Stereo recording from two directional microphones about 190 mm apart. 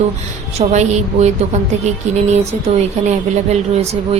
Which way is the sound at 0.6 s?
35° right (ahead or behind).